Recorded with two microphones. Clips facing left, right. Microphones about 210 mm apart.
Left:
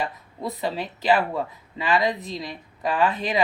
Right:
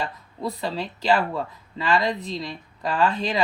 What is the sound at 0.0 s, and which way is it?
Speech, 15° left (ahead or behind).